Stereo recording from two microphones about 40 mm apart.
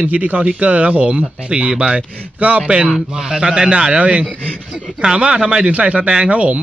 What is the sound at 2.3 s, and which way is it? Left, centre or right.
Speech, right.